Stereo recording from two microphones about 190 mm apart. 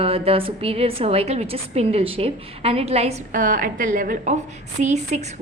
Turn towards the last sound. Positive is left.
turn(degrees=-35)  # may be behind; listen again after turning